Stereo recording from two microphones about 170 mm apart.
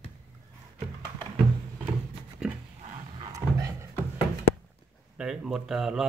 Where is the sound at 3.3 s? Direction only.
20° right (ahead or behind).